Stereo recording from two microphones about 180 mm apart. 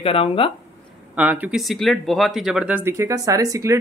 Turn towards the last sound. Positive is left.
turn(degrees=-20)  # may be behind; listen again after turning